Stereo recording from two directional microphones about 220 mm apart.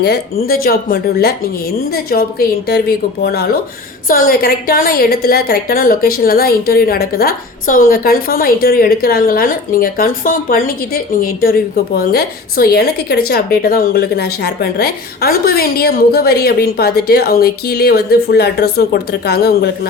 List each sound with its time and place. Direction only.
0.0 s a woman's voice: 45° left (ahead or behind)